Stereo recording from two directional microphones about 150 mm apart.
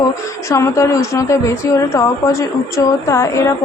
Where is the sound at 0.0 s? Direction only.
20° left (ahead or behind).